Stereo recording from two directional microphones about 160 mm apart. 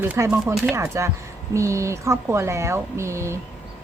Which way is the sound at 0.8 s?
15° right (ahead or behind).